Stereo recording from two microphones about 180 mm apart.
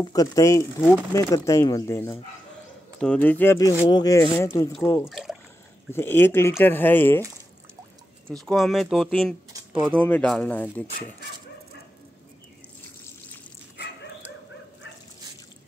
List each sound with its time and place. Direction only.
0.0 s speech: 20° left (ahead or behind)
5.1 s a sound: centre (ahead or behind)
5.9 s speech: 10° left (ahead or behind)
8.3 s speech: 5° left (ahead or behind)
9.5 s a sound: 20° right (ahead or behind)
9.9 s speech: 10° left (ahead or behind)